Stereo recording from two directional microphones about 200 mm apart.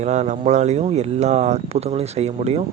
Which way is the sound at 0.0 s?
35° right (ahead or behind).